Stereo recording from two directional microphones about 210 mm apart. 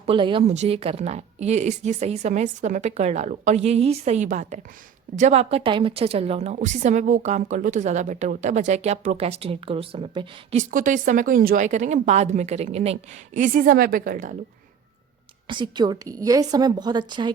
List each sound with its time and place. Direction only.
0.0 s a woman's voice: 25° right (ahead or behind); by 14.3 s 40° right (ahead or behind)
15.4 s a woman's voice: 20° right (ahead or behind)